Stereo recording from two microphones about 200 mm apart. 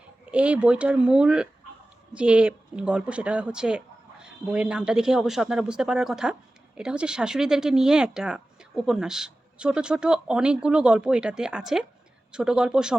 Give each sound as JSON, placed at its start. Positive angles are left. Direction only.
{"t": 0.3, "sound": "speech", "side_deg": -5}